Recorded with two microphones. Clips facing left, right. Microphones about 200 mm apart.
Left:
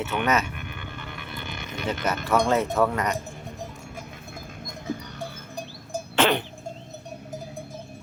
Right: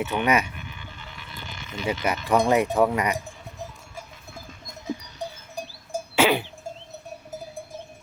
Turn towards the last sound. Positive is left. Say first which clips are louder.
# right 1 dB
turn(degrees=-10)  # may be behind; listen again after turning